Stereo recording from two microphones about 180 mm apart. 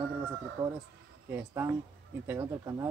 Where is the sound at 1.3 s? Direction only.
15° right (ahead or behind).